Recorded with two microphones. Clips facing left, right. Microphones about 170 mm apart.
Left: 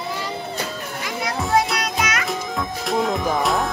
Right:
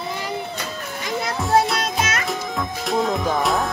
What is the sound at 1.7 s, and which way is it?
Music, 25° right (ahead or behind).